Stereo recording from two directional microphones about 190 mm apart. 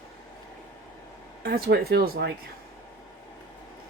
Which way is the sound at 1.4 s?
55° right (ahead or behind).